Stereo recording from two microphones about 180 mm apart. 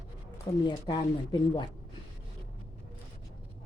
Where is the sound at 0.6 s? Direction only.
25° left (ahead or behind).